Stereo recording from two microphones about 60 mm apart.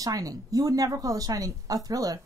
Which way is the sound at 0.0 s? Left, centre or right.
Right.